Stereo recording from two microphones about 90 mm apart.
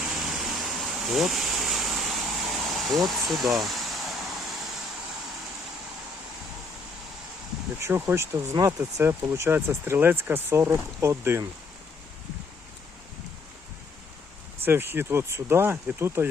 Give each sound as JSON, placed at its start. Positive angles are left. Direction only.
{"t": 0.0, "sound": "a sound", "side_deg": -5}
{"t": 7.8, "sound": "speech", "side_deg": -30}
{"t": 14.6, "sound": "speech", "side_deg": -25}